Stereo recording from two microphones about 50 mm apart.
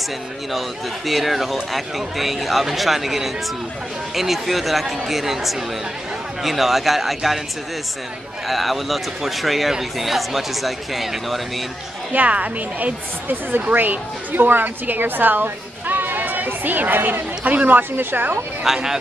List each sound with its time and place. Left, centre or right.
0.5 s speech: centre
8.5 s speech: centre
12.1 s a woman's voice: right
18.6 s speech: centre